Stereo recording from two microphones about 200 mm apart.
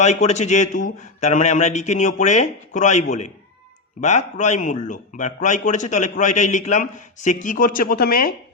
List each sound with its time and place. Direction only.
0.0 s a man's voice: 35° left (ahead or behind)